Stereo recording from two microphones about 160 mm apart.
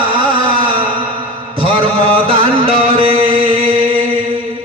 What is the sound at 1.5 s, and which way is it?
Chant, 35° right (ahead or behind).